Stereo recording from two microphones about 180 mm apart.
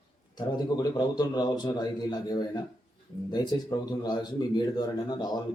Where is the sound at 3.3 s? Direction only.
20° left (ahead or behind).